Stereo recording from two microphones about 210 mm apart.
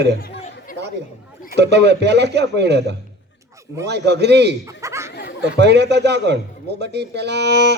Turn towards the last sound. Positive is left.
turn(degrees=-55)  # may be behind; listen again after turning